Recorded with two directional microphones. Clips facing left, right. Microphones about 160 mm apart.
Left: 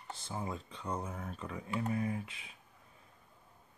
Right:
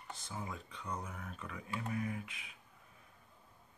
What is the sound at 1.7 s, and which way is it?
Computer keyboard, 25° left (ahead or behind).